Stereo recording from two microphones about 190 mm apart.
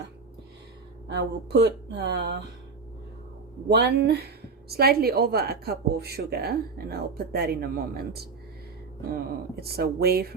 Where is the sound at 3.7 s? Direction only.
60° right (ahead or behind).